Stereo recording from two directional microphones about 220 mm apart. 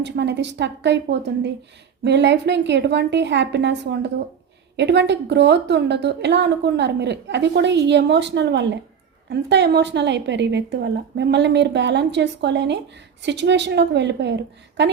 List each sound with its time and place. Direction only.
0.0 s a woman's voice: 50° right (ahead or behind)